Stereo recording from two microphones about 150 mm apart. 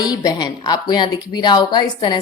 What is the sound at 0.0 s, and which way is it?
A woman's voice, 25° left (ahead or behind).